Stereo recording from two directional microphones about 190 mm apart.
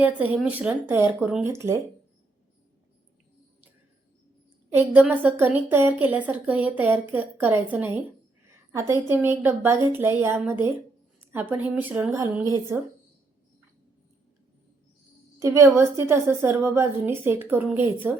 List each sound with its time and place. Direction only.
0.0 s a woman's voice: 5° right (ahead or behind)
4.7 s a woman's voice: 10° right (ahead or behind)
15.4 s a woman's voice: 15° right (ahead or behind)